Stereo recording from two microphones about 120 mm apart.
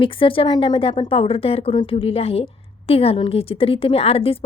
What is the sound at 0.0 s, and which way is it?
A woman's voice, 45° left (ahead or behind).